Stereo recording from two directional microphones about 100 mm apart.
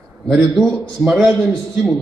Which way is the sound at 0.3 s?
5° left (ahead or behind).